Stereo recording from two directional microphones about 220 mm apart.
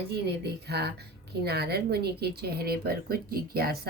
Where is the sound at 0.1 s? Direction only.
50° right (ahead or behind).